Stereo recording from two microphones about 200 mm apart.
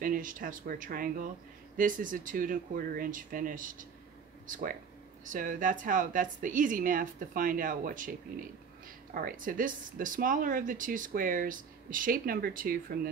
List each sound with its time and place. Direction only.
0.0 s speech: 40° right (ahead or behind)